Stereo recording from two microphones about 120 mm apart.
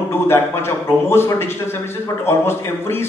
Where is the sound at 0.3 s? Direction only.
20° left (ahead or behind).